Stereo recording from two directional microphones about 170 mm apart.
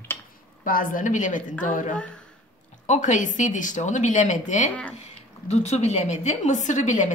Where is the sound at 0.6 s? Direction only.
55° left (ahead or behind).